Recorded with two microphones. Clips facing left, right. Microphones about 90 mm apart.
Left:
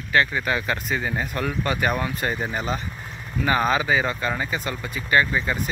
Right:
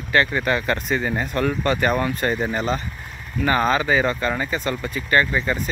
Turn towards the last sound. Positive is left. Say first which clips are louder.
# right 1 dB
turn(degrees=10)  # may be behind; listen again after turning